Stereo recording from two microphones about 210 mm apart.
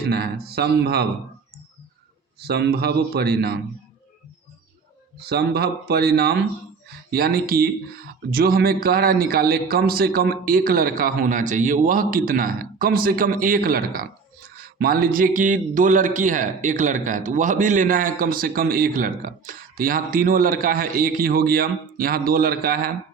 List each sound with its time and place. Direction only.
0.0 s speech: 50° right (ahead or behind)
2.4 s speech: 50° right (ahead or behind)
5.2 s speech: 50° right (ahead or behind)